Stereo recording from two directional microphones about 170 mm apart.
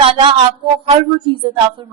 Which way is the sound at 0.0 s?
30° right (ahead or behind).